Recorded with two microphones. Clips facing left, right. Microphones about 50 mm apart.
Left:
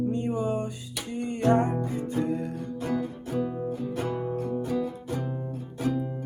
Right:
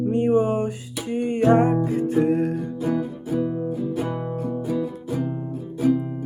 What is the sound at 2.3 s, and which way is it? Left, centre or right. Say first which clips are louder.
Music: right 9 dB; right.